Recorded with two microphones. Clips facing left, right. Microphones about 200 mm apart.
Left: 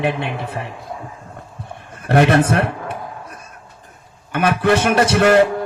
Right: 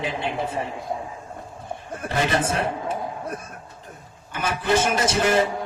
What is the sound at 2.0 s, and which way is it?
Speech, 65° left (ahead or behind).